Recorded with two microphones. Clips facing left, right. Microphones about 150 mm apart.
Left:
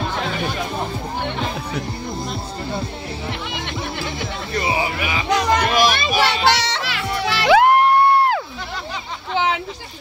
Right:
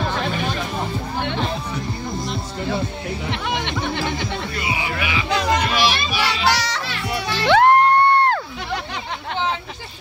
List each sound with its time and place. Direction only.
4.6 s music: 40° left (ahead or behind)
6.4 s music: 25° left (ahead or behind)
6.8 s music: 90° left
7.4 s music: 5° left (ahead or behind)